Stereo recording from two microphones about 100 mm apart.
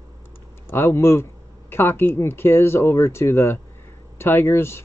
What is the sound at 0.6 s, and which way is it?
Speech, 25° left (ahead or behind).